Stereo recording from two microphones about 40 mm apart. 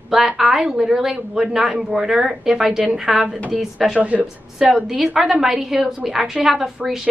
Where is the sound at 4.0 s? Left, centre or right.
Right.